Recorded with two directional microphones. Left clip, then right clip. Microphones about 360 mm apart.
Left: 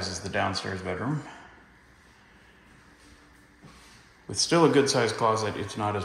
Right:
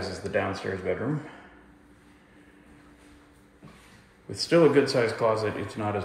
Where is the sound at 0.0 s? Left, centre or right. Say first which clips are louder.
Even; centre.